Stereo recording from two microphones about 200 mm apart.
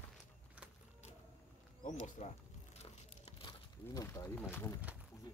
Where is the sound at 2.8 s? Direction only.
30° left (ahead or behind); by 4.7 s 10° left (ahead or behind).